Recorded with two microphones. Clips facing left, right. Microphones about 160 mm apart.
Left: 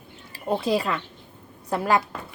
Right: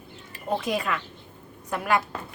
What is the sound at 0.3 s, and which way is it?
A woman's voice, 35° left (ahead or behind).